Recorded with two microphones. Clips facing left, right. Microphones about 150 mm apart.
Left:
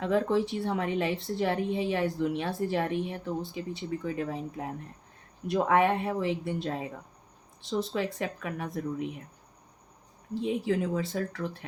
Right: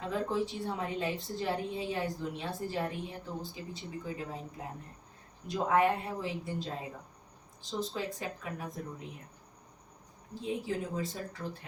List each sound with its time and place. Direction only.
0.0 s a woman's voice: 70° left (ahead or behind)
10.4 s a woman's voice: 75° left (ahead or behind)